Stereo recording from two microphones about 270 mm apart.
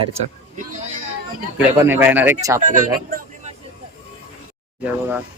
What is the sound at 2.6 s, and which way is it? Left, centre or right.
Speech, right.